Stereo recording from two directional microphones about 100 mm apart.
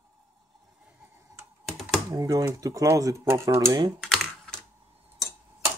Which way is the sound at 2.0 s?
35° right (ahead or behind).